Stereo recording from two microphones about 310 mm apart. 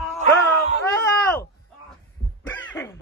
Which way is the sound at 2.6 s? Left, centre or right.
Centre.